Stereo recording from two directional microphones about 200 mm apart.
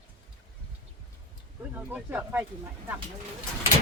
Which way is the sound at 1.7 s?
10° right (ahead or behind).